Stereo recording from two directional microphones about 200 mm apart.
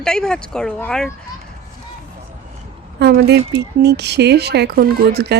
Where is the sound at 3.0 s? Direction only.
50° right (ahead or behind).